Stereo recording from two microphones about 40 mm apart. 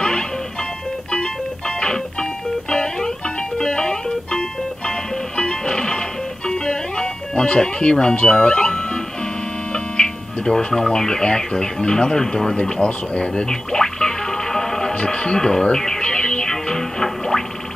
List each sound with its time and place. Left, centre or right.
1.8 s music: left
9.7 s speech: left
12.6 s music: left